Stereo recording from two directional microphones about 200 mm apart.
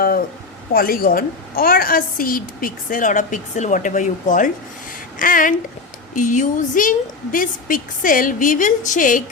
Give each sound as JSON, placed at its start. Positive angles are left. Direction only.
{"t": 0.7, "sound": "a woman's voice", "side_deg": 45}